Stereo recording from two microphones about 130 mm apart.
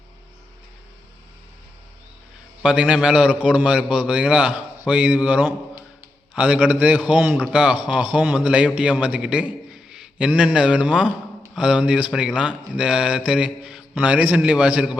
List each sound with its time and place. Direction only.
2.6 s a man's voice: 10° right (ahead or behind)